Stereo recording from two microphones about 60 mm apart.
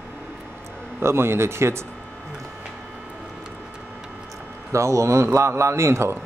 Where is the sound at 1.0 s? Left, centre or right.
Right.